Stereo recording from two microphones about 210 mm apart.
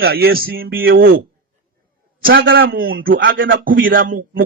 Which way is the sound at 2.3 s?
65° right (ahead or behind).